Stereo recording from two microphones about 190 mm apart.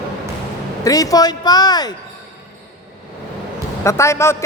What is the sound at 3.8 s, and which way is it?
Speech, 15° left (ahead or behind).